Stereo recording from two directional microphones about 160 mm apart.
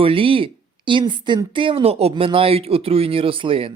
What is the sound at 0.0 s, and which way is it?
Speech, 35° right (ahead or behind).